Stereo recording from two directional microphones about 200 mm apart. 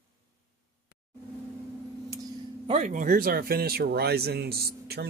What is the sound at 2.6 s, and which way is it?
Speech, 35° right (ahead or behind).